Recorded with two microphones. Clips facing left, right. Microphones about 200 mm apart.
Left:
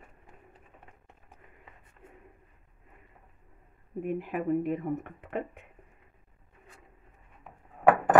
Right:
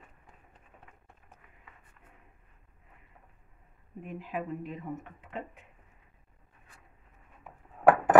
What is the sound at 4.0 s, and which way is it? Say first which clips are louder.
Speech: left 6 dB; 55° left (ahead or behind).